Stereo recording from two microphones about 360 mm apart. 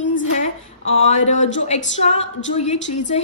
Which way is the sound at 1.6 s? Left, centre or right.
Centre.